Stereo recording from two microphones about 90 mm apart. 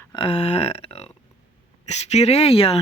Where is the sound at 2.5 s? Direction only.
90° left.